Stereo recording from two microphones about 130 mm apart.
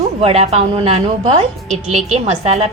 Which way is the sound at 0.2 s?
50° right (ahead or behind).